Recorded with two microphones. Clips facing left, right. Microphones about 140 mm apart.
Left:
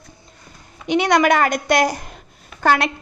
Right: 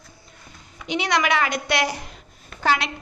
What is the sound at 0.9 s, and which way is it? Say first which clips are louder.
A woman's voice: left 7 dB; 50° left (ahead or behind).